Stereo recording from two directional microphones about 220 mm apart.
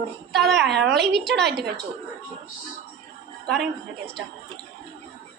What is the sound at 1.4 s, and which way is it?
Speech, 50° right (ahead or behind).